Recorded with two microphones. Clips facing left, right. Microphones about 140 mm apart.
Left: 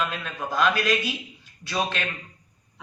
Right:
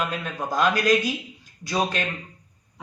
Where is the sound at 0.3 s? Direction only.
40° right (ahead or behind).